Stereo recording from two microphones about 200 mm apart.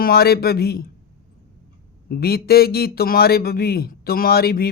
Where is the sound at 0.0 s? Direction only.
50° left (ahead or behind).